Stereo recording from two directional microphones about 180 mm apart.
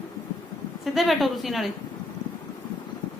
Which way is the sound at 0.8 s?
Centre (ahead or behind).